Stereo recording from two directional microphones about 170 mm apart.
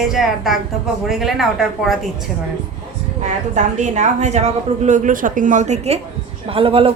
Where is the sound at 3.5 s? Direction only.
45° right (ahead or behind).